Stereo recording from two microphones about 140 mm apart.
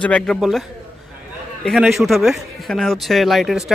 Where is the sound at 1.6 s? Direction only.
Centre (ahead or behind).